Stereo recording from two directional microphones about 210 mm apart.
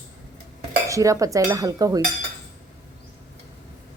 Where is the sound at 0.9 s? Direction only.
15° right (ahead or behind).